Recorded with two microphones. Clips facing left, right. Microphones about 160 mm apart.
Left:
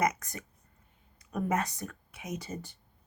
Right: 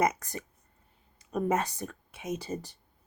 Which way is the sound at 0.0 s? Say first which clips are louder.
Right 2 dB; 30° right (ahead or behind).